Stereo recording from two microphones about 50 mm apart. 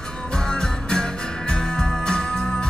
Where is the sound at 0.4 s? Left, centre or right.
Centre.